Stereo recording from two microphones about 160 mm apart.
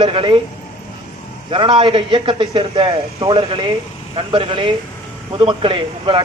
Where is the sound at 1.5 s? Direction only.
30° right (ahead or behind).